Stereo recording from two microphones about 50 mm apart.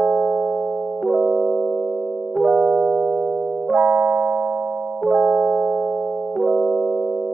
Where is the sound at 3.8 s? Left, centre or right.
Centre.